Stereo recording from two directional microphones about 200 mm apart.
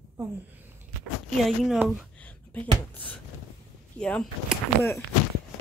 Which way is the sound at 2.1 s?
5° left (ahead or behind).